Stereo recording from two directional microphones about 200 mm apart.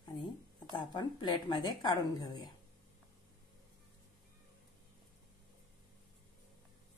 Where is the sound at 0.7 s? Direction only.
20° left (ahead or behind).